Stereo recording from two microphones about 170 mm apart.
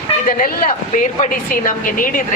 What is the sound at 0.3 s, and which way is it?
Speech, 55° left (ahead or behind).